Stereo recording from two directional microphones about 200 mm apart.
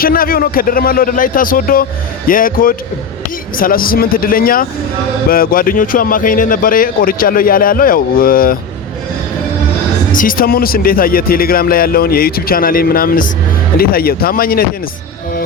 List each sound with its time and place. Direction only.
0.0 s speech: 45° left (ahead or behind)
10.1 s speech: 45° left (ahead or behind)